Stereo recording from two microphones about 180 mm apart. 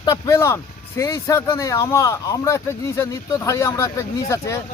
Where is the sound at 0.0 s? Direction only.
20° left (ahead or behind).